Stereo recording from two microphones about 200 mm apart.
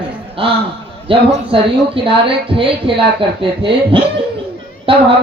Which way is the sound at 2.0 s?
25° right (ahead or behind).